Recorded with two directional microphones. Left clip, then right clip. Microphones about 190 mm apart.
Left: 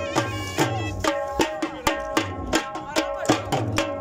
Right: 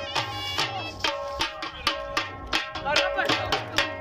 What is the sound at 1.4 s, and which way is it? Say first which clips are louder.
Music: left 4 dB; 70° left (ahead or behind).